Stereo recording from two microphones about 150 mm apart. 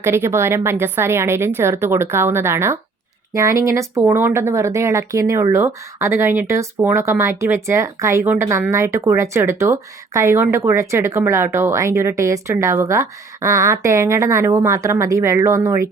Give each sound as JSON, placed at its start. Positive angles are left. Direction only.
{"t": 0.0, "sound": "a woman's voice", "side_deg": -15}